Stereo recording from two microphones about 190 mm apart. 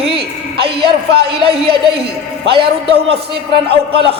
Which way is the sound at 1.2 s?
30° right (ahead or behind).